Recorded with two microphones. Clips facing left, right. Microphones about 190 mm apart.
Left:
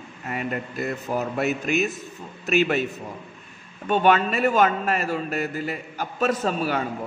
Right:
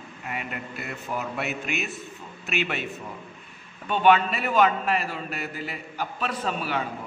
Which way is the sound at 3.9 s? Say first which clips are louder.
Left 1 dB; 45° left (ahead or behind).